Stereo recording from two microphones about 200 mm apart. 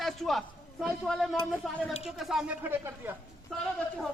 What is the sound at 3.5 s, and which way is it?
Speech, centre (ahead or behind).